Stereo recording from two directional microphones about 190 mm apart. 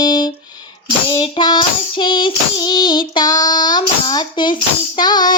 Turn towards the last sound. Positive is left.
turn(degrees=20)  # may be behind; listen again after turning